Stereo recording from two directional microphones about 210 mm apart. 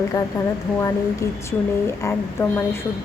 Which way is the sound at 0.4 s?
15° left (ahead or behind).